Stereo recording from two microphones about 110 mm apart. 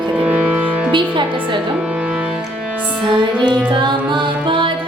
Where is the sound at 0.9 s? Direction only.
45° right (ahead or behind).